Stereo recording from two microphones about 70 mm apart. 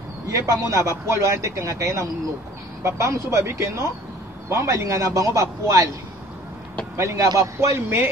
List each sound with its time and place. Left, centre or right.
0.3 s a man's voice: right
7.0 s a man's voice: right